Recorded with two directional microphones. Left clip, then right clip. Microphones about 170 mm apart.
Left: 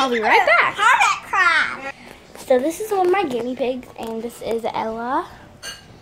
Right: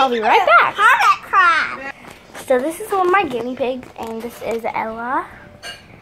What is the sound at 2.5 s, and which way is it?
Speech, 20° left (ahead or behind).